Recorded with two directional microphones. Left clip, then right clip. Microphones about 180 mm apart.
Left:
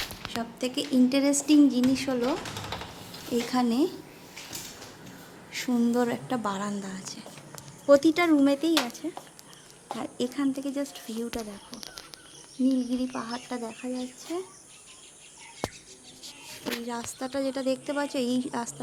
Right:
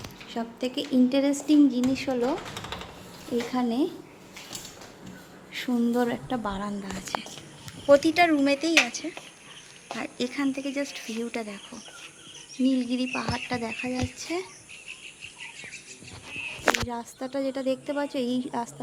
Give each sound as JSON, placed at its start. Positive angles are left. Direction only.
{"t": 0.3, "sound": "a woman's voice", "side_deg": -5}
{"t": 3.5, "sound": "a woman's voice", "side_deg": 0}
{"t": 5.5, "sound": "a woman's voice", "side_deg": 0}
{"t": 9.9, "sound": "a woman's voice", "side_deg": 0}
{"t": 12.7, "sound": "speech", "side_deg": -10}
{"t": 16.9, "sound": "a woman's voice", "side_deg": 0}